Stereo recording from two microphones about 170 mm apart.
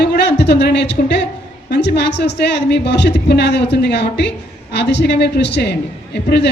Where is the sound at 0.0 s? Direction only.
80° left.